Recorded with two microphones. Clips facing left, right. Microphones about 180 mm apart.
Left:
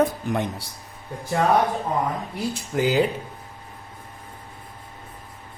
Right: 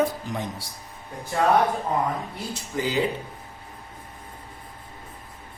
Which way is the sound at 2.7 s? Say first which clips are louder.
Left 5 dB; 55° left (ahead or behind).